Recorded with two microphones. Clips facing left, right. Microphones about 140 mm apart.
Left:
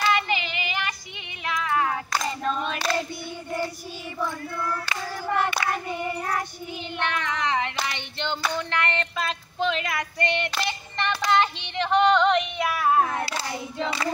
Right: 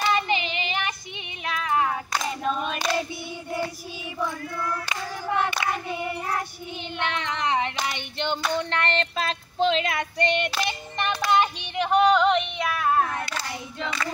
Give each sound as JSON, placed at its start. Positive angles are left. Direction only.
{"t": 0.0, "sound": "child singing", "side_deg": -20}
{"t": 1.4, "sound": "music", "side_deg": -20}
{"t": 2.4, "sound": "singing", "side_deg": -10}
{"t": 7.0, "sound": "child singing", "side_deg": -20}
{"t": 7.8, "sound": "hands", "side_deg": -15}
{"t": 8.5, "sound": "female singing", "side_deg": -25}
{"t": 10.5, "sound": "child singing", "side_deg": -15}
{"t": 13.4, "sound": "child singing", "side_deg": 30}